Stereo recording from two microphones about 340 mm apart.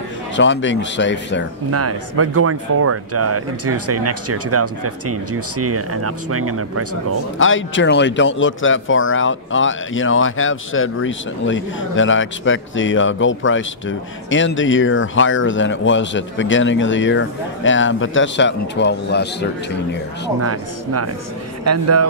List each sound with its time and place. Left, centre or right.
0.4 s speech: left
1.7 s speech: right
7.3 s speech: left
20.3 s speech: right